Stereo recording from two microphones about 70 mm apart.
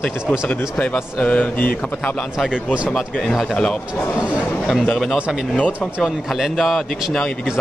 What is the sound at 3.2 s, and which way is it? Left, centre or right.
Speech, centre.